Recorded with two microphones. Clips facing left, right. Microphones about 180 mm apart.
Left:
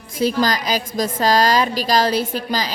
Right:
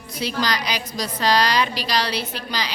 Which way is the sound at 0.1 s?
45° left (ahead or behind).